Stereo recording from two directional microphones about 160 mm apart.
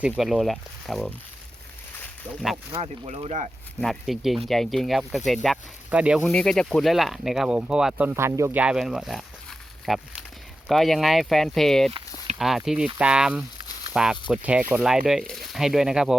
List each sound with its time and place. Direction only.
0.2 s speech: centre (ahead or behind)
2.7 s speech: 40° right (ahead or behind)
3.8 s speech: centre (ahead or behind)
5.9 s speech: 10° right (ahead or behind)
6.2 s speech: 5° left (ahead or behind); by 8.6 s 15° right (ahead or behind)
8.6 s a sound: 5° right (ahead or behind)
10.7 s speech: centre (ahead or behind)
11.9 s a sound: 40° right (ahead or behind)
12.4 s speech: centre (ahead or behind)